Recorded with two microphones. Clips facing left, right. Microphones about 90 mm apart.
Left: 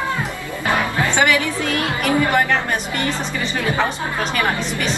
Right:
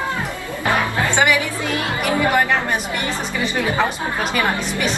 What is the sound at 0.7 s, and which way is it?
A woman's voice, 15° right (ahead or behind).